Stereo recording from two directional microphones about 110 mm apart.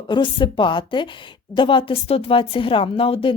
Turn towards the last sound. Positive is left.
turn(degrees=55)  # may be behind; listen again after turning